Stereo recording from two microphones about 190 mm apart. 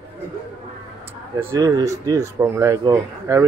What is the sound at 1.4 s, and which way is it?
Speech, 15° right (ahead or behind).